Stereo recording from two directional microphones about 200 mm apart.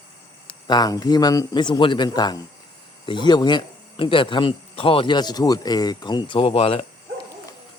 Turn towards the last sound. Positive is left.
turn(degrees=30)  # may be behind; listen again after turning